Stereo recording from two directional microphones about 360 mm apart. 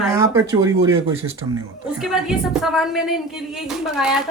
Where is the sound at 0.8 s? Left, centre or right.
Right.